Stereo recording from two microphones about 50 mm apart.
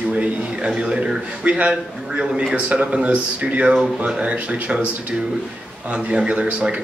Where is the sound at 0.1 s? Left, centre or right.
Centre.